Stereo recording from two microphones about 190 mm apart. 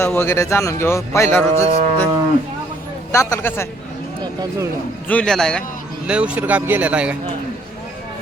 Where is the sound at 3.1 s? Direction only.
15° left (ahead or behind).